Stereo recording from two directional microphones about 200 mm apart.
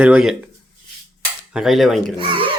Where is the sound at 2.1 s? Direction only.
25° right (ahead or behind).